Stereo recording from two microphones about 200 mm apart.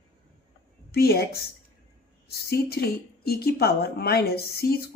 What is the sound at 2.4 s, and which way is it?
Speech, 50° left (ahead or behind).